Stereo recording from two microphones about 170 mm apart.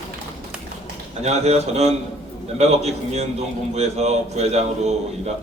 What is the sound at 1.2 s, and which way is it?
A man's voice, 40° right (ahead or behind).